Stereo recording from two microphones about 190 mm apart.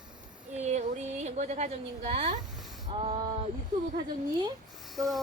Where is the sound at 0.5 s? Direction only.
35° right (ahead or behind).